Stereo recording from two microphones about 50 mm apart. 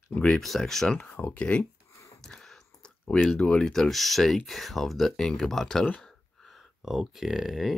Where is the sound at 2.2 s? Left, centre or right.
Centre.